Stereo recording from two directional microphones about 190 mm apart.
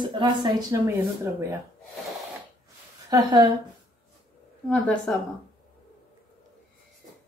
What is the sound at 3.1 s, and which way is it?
Speech, 20° right (ahead or behind).